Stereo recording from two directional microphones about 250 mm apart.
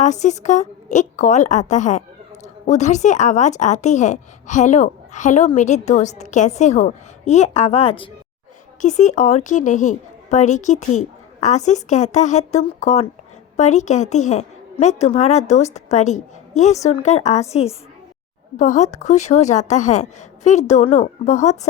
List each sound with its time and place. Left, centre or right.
0.0 s a woman's voice: left